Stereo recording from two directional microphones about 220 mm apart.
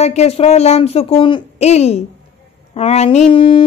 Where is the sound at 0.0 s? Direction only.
30° left (ahead or behind).